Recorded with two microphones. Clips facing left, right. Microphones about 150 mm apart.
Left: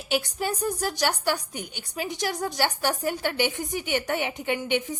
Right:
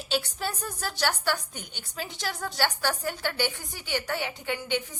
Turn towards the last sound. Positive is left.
turn(degrees=20)  # may be behind; listen again after turning